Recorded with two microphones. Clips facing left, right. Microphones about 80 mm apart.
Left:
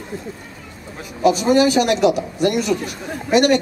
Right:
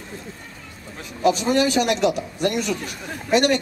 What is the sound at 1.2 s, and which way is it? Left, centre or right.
A man's voice, centre.